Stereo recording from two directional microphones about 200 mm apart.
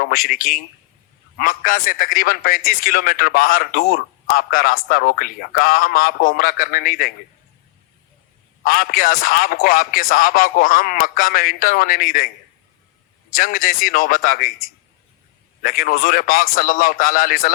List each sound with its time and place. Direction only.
0.0 s a man's voice: 45° left (ahead or behind)
8.6 s a man's voice: 45° left (ahead or behind)
13.3 s a man's voice: 45° left (ahead or behind)